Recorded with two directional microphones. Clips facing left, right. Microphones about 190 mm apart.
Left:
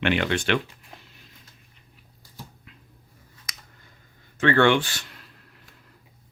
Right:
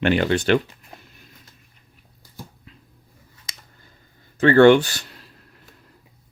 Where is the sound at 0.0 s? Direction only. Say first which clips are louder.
Right 5 dB; 40° right (ahead or behind).